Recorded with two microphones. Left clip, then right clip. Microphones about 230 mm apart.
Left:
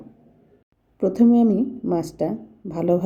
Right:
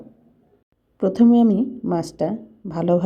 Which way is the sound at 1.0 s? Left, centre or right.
Centre.